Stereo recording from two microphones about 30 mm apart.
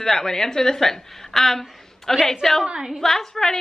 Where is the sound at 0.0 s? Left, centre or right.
Centre.